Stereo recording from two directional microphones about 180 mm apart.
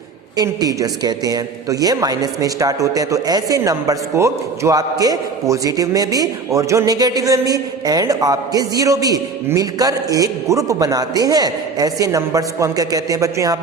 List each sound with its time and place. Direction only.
0.3 s a man's voice: 20° right (ahead or behind)